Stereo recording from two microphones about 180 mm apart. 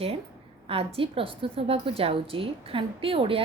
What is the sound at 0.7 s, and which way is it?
A woman's voice, 35° right (ahead or behind).